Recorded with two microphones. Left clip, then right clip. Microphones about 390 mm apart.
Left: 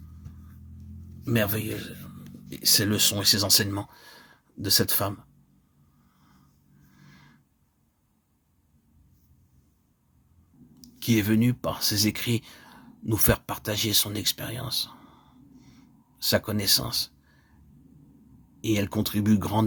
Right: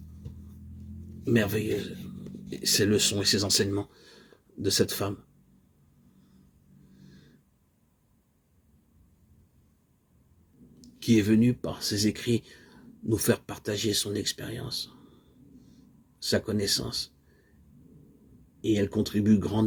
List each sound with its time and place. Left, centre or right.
1.2 s speech: left
7.0 s a sound: left
10.8 s speech: left
16.1 s speech: left
18.6 s speech: left